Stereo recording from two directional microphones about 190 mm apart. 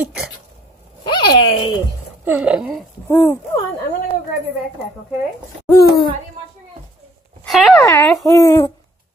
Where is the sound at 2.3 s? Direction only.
10° right (ahead or behind).